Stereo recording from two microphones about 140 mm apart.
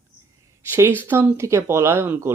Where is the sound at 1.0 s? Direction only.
15° right (ahead or behind).